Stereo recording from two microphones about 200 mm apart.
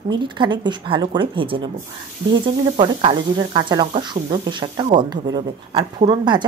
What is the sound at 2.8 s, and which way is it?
Speech, 25° right (ahead or behind).